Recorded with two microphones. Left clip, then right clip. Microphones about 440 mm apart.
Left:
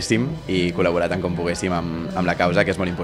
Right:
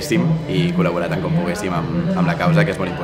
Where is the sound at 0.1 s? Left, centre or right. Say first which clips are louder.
Right 2 dB; left.